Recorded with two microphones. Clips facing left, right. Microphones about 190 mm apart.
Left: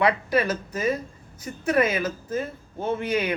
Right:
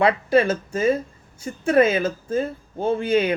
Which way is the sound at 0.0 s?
25° right (ahead or behind).